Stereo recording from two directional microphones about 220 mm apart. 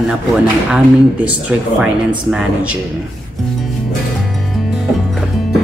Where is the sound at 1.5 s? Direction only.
5° right (ahead or behind).